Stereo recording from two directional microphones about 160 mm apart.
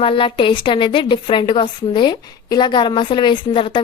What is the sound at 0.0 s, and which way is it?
A woman's voice, 35° left (ahead or behind).